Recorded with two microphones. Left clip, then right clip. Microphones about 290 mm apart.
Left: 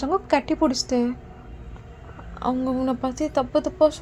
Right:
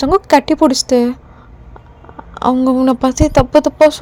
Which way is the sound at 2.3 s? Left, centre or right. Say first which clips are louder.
Right 12 dB; right.